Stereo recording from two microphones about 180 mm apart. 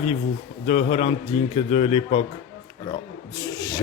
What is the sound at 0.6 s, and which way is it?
A man's voice, 35° left (ahead or behind).